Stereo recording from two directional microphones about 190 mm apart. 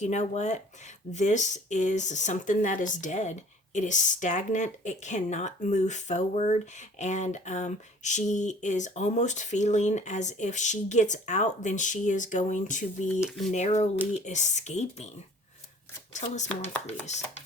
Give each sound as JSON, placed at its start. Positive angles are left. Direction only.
{"t": 0.0, "sound": "speech", "side_deg": 40}
{"t": 13.1, "sound": "speech", "side_deg": 0}
{"t": 13.5, "sound": "speech", "side_deg": 35}
{"t": 16.1, "sound": "speech", "side_deg": 40}